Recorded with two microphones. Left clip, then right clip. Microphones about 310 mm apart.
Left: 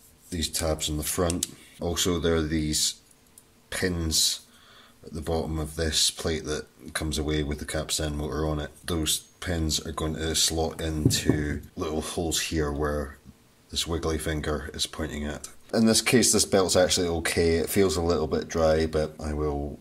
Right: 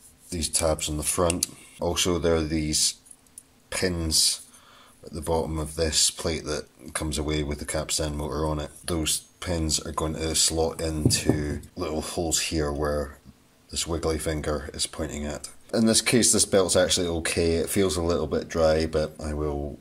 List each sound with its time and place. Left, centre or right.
0.3 s speech: centre